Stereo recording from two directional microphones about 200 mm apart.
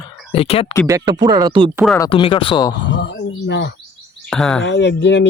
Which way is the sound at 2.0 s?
25° left (ahead or behind).